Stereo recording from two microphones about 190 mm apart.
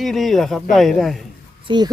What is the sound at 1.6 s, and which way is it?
Speech, 25° right (ahead or behind).